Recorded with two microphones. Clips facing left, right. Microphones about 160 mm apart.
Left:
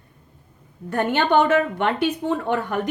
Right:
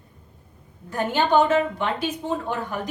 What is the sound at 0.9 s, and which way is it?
A woman's voice, 65° left (ahead or behind).